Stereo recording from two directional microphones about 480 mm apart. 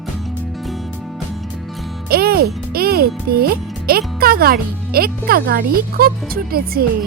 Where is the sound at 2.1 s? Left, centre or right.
Centre.